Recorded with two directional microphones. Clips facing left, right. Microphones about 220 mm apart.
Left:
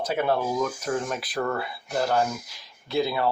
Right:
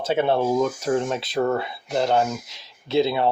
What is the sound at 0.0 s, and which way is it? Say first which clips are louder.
Speech: right 4 dB; 25° right (ahead or behind).